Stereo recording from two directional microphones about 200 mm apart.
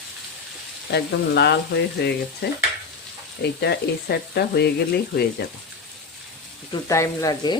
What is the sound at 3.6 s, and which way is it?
Frying, 55° left (ahead or behind).